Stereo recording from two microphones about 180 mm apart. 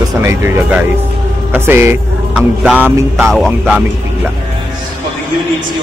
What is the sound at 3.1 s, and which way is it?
Music, centre (ahead or behind).